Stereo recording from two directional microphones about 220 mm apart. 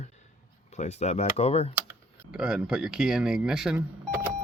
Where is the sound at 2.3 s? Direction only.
5° right (ahead or behind).